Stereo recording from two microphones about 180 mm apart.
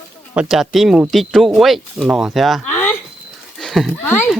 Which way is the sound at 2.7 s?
10° left (ahead or behind).